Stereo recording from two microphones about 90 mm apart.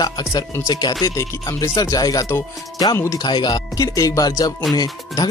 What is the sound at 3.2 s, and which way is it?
Speech, 50° left (ahead or behind).